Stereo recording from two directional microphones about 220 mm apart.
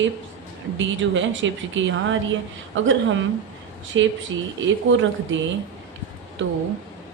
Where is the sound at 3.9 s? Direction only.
60° right (ahead or behind).